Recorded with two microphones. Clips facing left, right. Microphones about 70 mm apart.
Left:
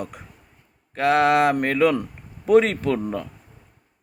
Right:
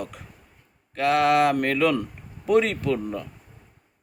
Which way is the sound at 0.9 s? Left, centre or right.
Left.